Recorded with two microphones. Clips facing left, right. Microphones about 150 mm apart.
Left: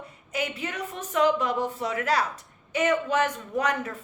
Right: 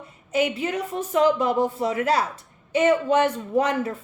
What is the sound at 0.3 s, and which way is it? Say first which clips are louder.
A woman's voice: right 8 dB; 30° right (ahead or behind).